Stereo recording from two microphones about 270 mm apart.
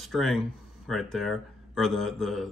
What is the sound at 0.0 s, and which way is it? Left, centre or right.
Speech, centre.